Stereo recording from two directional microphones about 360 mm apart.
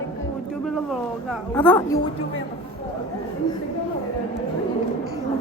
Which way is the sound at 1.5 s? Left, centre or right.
Centre.